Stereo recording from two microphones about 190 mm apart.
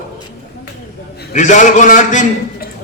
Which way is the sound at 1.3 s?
40° left (ahead or behind).